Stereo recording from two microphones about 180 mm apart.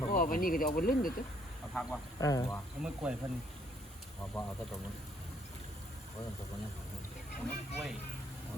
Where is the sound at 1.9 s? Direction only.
20° left (ahead or behind).